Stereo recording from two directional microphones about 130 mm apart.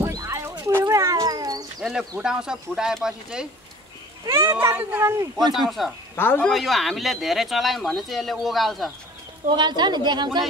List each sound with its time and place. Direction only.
0.0 s cat: 20° right (ahead or behind)
1.8 s speech: centre (ahead or behind)
4.3 s speech: 15° right (ahead or behind)
5.7 s speech: centre (ahead or behind)
6.1 s speech: 15° left (ahead or behind)
6.4 s speech: centre (ahead or behind)
9.6 s speech: 35° right (ahead or behind)